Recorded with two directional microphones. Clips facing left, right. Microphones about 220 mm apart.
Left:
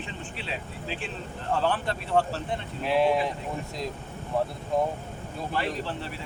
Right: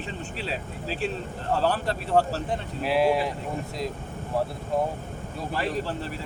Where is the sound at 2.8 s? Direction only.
5° right (ahead or behind).